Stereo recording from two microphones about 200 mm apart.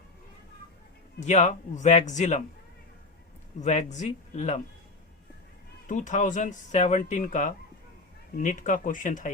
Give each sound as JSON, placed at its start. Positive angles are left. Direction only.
{"t": 1.2, "sound": "speech", "side_deg": 35}
{"t": 3.6, "sound": "speech", "side_deg": 35}
{"t": 5.9, "sound": "speech", "side_deg": 40}